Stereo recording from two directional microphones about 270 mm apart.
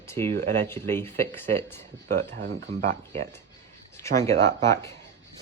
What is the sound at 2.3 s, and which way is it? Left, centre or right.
Speech, right.